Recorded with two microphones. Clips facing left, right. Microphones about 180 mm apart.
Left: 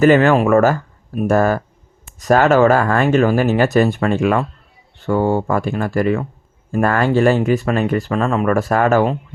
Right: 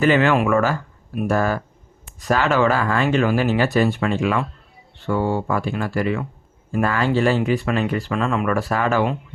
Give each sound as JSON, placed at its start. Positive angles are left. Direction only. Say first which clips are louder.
{"t": 0.0, "sound": "speech", "louder": "left 5 dB", "side_deg": 45}